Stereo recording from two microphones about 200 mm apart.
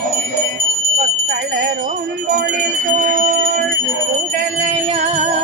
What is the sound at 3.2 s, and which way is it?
Music, 45° right (ahead or behind).